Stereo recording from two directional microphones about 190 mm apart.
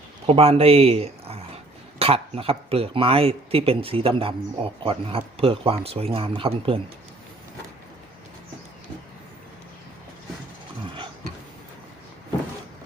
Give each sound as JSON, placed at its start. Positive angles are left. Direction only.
{"t": 0.3, "sound": "speech", "side_deg": -30}